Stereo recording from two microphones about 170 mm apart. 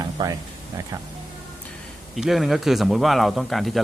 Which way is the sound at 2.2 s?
Centre (ahead or behind).